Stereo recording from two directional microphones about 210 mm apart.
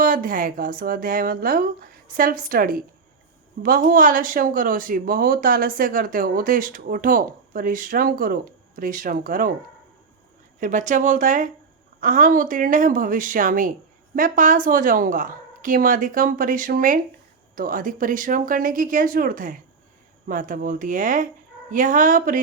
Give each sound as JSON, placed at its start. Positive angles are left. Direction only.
{"t": 0.0, "sound": "speech", "side_deg": -40}
{"t": 10.6, "sound": "speech", "side_deg": -35}